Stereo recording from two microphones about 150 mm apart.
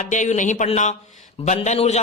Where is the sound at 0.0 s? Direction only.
55° left (ahead or behind).